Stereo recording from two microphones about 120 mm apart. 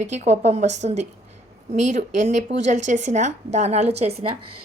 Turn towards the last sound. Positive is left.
turn(degrees=-60)  # may be behind; listen again after turning